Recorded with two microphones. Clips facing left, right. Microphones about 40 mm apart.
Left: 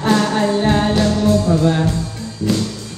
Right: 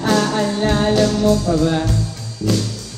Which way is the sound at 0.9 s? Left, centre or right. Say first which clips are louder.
Even; left.